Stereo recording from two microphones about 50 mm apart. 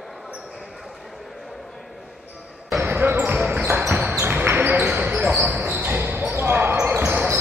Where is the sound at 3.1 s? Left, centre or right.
Right.